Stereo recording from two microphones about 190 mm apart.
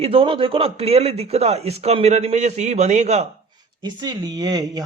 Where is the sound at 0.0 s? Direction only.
30° right (ahead or behind).